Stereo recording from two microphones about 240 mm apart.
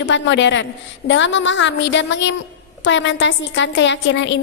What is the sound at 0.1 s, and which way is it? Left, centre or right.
A woman's voice, left.